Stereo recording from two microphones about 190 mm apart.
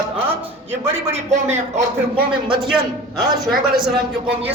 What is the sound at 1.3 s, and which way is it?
Speech, 35° right (ahead or behind).